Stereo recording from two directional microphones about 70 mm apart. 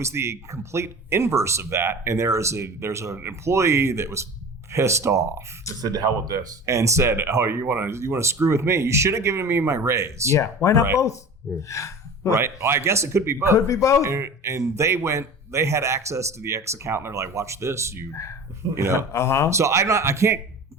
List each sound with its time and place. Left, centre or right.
0.0 s speech: right
6.7 s speech: right
10.3 s speech: left
11.7 s gasp: left
12.4 s speech: right
13.7 s speech: left
14.0 s speech: right
18.9 s speech: left
19.5 s speech: right